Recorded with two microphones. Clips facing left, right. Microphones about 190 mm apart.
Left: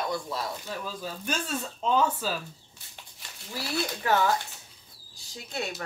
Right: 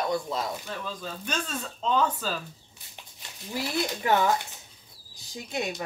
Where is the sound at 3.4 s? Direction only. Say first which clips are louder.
Right 2 dB; 20° right (ahead or behind).